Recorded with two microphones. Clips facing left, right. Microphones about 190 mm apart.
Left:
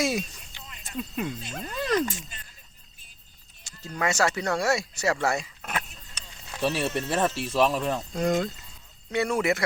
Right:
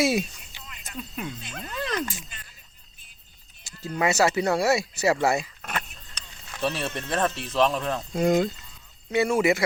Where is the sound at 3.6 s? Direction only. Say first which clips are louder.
Right 3 dB; 5° right (ahead or behind).